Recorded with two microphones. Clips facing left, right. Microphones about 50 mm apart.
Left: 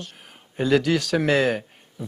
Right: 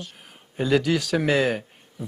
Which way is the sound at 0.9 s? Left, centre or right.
Centre.